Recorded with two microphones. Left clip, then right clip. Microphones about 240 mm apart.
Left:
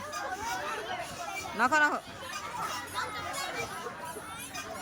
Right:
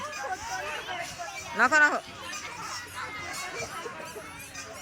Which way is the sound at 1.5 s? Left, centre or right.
Centre.